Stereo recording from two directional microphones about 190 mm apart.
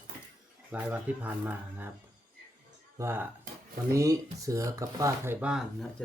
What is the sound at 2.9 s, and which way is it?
Speech, 15° right (ahead or behind).